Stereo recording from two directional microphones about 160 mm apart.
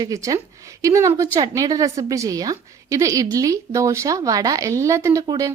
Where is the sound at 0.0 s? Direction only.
20° right (ahead or behind).